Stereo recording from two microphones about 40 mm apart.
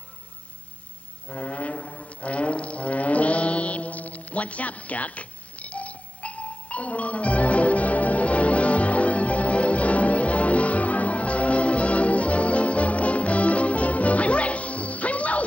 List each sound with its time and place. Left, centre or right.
1.3 s music: left